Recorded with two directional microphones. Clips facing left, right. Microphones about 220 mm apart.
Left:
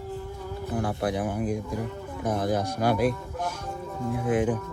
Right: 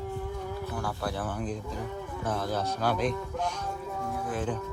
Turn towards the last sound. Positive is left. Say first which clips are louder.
# left 8 dB
turn(degrees=20)  # may be behind; listen again after turning